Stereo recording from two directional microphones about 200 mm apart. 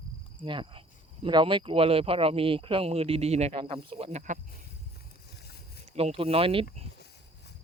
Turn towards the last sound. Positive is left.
turn(degrees=-25)  # may be behind; listen again after turning